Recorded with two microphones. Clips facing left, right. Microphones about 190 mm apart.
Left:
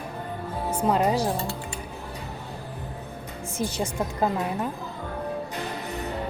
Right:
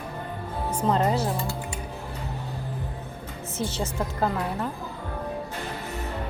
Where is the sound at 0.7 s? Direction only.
10° left (ahead or behind).